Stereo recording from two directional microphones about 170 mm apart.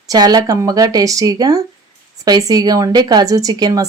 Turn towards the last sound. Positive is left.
turn(degrees=-20)  # may be behind; listen again after turning